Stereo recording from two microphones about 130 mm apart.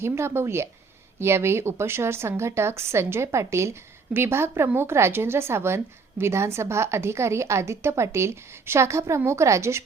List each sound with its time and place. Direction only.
0.0 s a woman's voice: 20° right (ahead or behind)